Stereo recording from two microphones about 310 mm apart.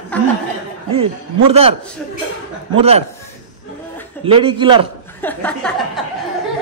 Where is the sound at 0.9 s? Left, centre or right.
Centre.